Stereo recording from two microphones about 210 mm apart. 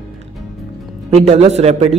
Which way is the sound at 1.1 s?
30° right (ahead or behind).